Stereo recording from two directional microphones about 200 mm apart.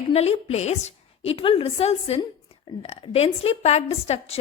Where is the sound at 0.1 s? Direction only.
30° left (ahead or behind).